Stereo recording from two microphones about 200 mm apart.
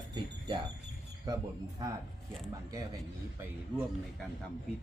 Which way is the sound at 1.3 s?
20° right (ahead or behind).